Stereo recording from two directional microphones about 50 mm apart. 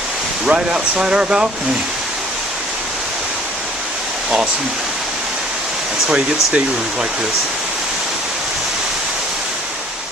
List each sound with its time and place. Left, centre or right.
0.4 s speech: centre
6.1 s speech: right